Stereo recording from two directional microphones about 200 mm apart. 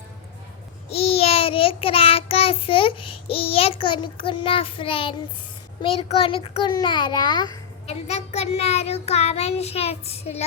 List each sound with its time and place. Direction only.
0.9 s child singing: 30° left (ahead or behind)
5.8 s a child's voice: 30° left (ahead or behind)
8.0 s child singing: 35° left (ahead or behind)